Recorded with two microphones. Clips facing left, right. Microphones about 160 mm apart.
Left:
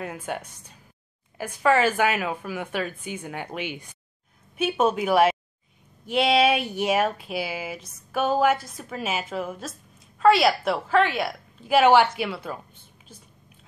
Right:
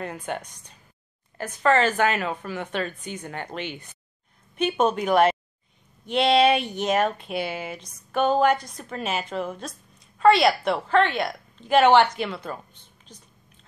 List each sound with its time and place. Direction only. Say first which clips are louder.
0.0 s a woman's voice: right 1 dB; 5° left (ahead or behind)